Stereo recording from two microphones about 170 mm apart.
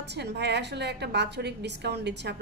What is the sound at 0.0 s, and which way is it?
A woman's voice, 85° right.